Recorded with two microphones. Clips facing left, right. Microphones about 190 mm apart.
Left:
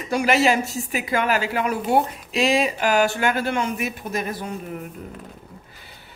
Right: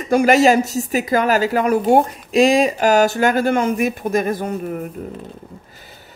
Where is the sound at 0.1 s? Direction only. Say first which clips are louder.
Right 6 dB; 45° right (ahead or behind).